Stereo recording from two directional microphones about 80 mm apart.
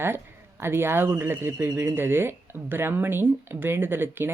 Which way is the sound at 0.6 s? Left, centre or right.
Right.